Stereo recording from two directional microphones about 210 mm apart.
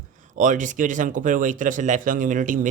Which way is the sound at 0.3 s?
35° right (ahead or behind).